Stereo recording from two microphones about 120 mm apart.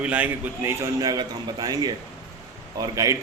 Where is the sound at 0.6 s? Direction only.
30° right (ahead or behind).